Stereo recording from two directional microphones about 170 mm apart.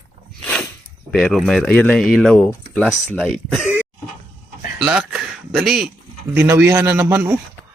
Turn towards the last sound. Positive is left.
turn(degrees=-15)  # may be behind; listen again after turning